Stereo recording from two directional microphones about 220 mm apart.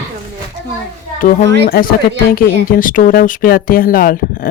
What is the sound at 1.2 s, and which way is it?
Speech, 40° left (ahead or behind).